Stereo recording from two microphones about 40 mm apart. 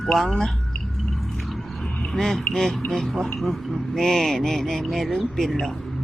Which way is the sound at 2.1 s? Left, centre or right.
Centre.